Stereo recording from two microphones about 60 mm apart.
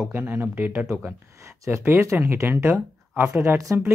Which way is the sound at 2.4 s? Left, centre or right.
Right.